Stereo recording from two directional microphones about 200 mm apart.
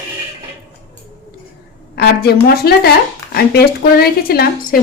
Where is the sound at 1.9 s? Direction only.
55° left (ahead or behind).